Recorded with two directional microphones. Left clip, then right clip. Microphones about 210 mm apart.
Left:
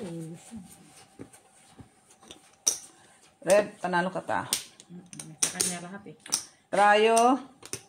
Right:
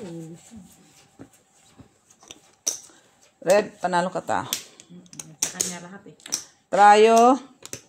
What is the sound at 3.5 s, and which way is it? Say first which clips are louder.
Speech: right 3 dB; 50° right (ahead or behind).